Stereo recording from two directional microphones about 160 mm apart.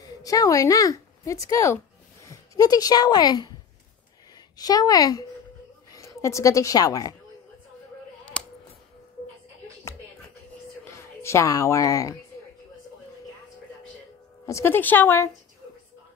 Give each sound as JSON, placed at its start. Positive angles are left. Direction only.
{"t": 0.0, "sound": "a woman's voice", "side_deg": 20}
{"t": 4.6, "sound": "a woman's voice", "side_deg": 25}
{"t": 8.3, "sound": "a sound", "side_deg": 5}
{"t": 10.9, "sound": "speech", "side_deg": 15}
{"t": 14.4, "sound": "a woman's voice", "side_deg": 15}